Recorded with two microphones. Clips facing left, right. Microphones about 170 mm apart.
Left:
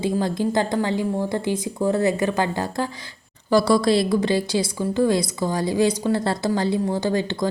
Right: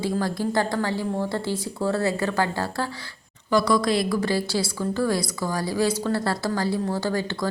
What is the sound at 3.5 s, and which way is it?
A woman's voice, 30° left (ahead or behind).